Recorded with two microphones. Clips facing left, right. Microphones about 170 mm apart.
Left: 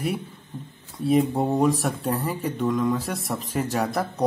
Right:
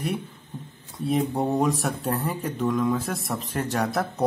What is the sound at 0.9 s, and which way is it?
Speech, centre (ahead or behind).